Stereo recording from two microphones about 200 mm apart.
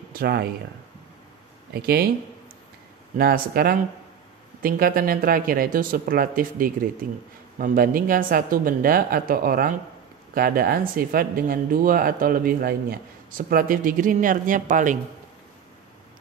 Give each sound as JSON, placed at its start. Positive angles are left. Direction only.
{"t": 0.1, "sound": "speech", "side_deg": -50}
{"t": 1.7, "sound": "speech", "side_deg": -50}
{"t": 3.2, "sound": "speech", "side_deg": -50}